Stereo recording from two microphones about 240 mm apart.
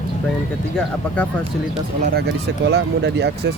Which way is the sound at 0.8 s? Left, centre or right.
Centre.